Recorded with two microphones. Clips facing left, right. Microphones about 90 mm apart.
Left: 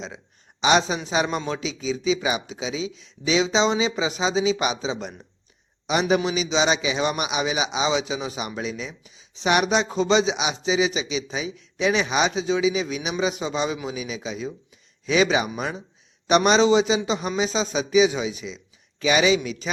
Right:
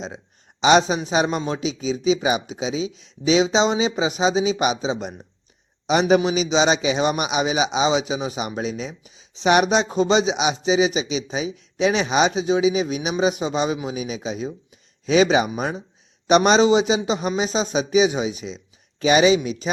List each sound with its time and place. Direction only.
0.6 s speech: 25° right (ahead or behind)